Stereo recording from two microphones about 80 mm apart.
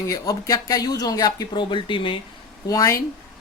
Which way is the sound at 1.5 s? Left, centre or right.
Left.